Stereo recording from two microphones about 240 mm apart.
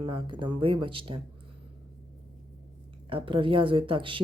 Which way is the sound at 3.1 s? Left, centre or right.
Right.